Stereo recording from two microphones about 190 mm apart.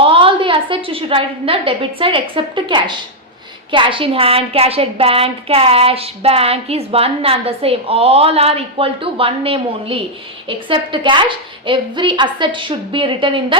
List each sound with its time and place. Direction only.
0.0 s a woman's voice: 30° right (ahead or behind)